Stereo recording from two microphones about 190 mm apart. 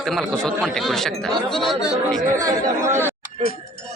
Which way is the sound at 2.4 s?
15° right (ahead or behind).